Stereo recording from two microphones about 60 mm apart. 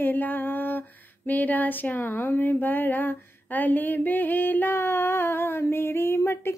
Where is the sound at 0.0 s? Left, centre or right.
Left.